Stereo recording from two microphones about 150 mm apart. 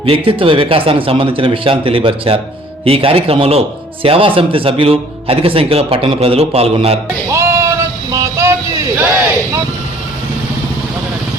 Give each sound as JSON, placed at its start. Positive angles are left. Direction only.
{"t": 0.0, "sound": "a man's voice", "side_deg": -35}
{"t": 7.3, "sound": "music", "side_deg": -20}